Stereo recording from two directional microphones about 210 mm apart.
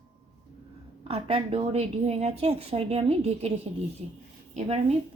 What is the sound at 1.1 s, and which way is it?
A woman's voice, 25° right (ahead or behind).